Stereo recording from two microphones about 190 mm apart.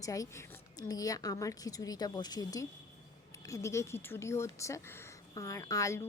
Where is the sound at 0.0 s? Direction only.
15° left (ahead or behind).